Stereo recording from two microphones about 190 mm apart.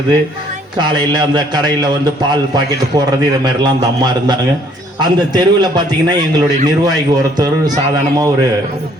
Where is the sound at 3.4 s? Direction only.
20° right (ahead or behind).